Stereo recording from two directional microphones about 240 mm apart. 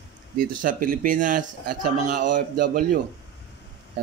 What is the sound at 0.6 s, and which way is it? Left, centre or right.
Speech, right.